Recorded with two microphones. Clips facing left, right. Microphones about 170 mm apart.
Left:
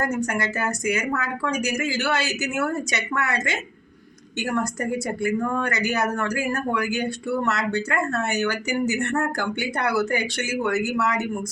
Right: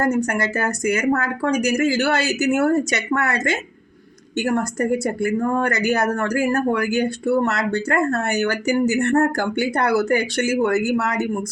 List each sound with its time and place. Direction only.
0.0 s speech: 40° right (ahead or behind)
5.2 s speech: 40° right (ahead or behind)